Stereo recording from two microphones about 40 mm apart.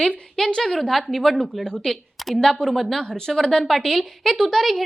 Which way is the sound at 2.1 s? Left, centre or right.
Centre.